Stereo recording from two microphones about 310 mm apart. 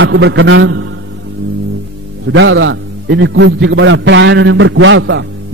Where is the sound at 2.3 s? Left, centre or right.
Right.